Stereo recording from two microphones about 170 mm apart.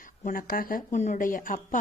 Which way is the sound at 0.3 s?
55° left (ahead or behind).